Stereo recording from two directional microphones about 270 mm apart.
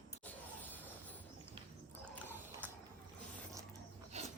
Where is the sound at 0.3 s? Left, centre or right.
Centre.